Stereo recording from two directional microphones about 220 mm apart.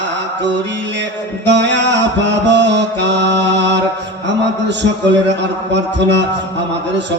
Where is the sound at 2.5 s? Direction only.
55° right (ahead or behind).